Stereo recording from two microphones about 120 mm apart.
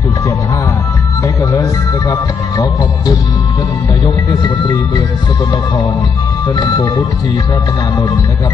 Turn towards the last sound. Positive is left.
turn(degrees=35)  # may be behind; listen again after turning